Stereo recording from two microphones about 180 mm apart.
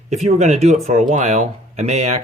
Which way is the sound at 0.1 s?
35° right (ahead or behind).